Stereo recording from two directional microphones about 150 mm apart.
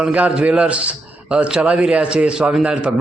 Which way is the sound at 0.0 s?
10° right (ahead or behind).